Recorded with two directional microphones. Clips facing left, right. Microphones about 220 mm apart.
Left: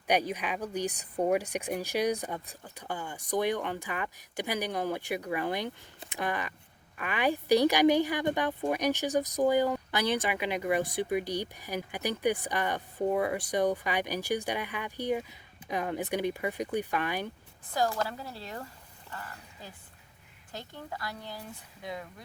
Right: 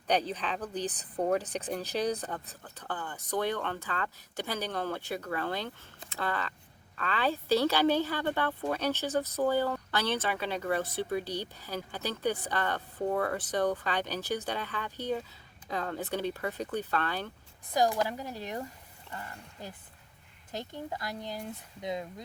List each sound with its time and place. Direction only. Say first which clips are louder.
0.1 s a woman's voice: left 1 dB; 10° left (ahead or behind)
17.7 s a woman's voice: right 2 dB; 15° right (ahead or behind)